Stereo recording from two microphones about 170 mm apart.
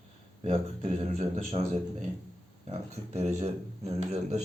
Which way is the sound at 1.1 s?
40° right (ahead or behind).